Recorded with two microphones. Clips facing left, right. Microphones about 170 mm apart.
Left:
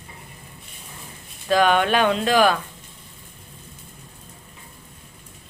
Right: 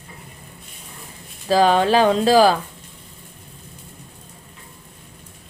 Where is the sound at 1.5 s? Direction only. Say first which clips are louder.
Right 3 dB; 30° right (ahead or behind).